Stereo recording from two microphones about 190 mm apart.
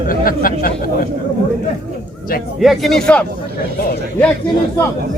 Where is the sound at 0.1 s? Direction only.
50° left (ahead or behind).